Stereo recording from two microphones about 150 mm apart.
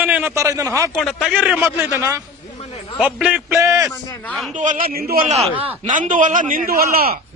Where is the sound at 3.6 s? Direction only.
20° right (ahead or behind).